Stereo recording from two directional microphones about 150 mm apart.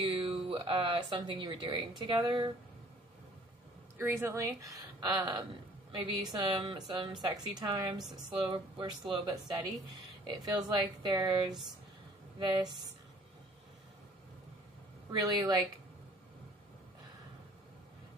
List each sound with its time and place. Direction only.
0.0 s speech: 35° right (ahead or behind)
4.0 s a woman's voice: 20° right (ahead or behind)
8.0 s speech: 5° right (ahead or behind)
8.7 s a woman's voice: 30° right (ahead or behind)
11.0 s a woman's voice: 30° right (ahead or behind)
15.0 s a woman's voice: 25° right (ahead or behind)